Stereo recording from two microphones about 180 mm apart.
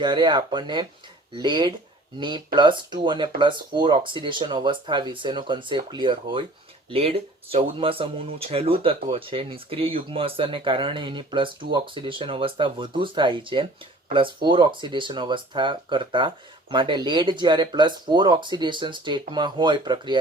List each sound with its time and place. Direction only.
0.0 s speech: 25° right (ahead or behind)